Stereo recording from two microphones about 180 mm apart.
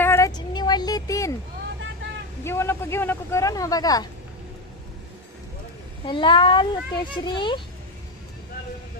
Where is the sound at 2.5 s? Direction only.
15° left (ahead or behind).